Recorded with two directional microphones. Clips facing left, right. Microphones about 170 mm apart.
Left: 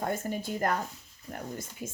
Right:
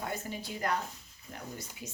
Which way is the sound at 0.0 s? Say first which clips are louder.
Left 6 dB; 50° left (ahead or behind).